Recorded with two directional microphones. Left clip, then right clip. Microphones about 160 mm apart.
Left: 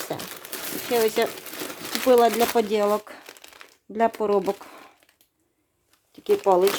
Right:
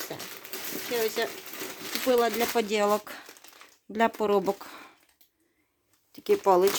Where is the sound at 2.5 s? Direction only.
15° left (ahead or behind).